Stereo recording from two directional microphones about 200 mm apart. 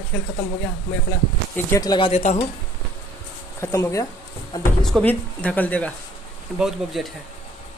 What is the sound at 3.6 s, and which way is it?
Speech, 15° left (ahead or behind).